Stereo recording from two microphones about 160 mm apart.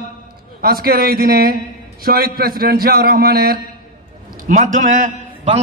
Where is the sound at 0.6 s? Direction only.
70° right (ahead or behind).